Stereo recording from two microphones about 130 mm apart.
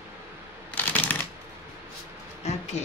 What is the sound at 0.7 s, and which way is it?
Typewriter, 15° left (ahead or behind).